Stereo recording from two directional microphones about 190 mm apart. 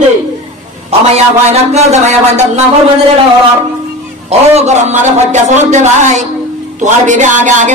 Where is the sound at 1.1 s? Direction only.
35° right (ahead or behind).